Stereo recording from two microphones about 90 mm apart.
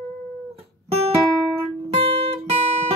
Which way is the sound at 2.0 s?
90° right.